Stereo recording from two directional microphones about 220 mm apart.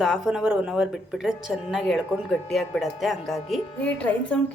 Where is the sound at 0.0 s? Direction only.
Centre (ahead or behind).